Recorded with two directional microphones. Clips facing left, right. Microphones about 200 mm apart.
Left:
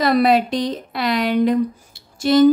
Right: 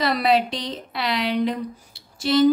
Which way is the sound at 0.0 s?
50° left (ahead or behind).